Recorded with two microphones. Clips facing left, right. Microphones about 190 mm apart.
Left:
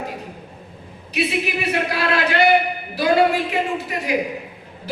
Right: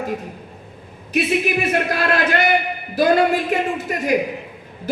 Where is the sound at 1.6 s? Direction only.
50° right (ahead or behind).